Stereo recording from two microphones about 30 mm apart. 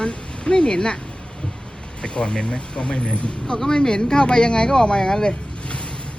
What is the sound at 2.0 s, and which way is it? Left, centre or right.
Speech, left.